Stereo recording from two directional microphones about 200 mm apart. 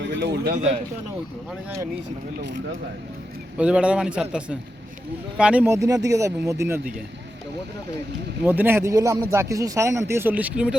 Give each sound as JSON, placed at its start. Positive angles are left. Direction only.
{"t": 0.1, "sound": "speech", "side_deg": -55}
{"t": 3.6, "sound": "a man's voice", "side_deg": -5}
{"t": 8.4, "sound": "speech", "side_deg": -10}